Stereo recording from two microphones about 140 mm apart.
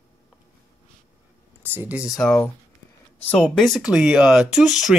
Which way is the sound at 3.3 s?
5° left (ahead or behind).